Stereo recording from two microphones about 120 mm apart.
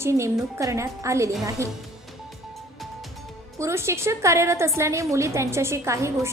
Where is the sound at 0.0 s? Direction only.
25° right (ahead or behind).